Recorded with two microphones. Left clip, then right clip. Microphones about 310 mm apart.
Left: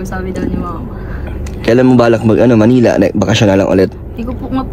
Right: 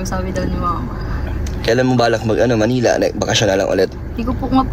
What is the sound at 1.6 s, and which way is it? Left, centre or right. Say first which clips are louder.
A man's voice: left 5 dB; centre.